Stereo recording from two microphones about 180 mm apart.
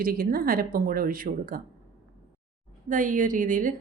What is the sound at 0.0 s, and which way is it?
Speech, 55° right (ahead or behind).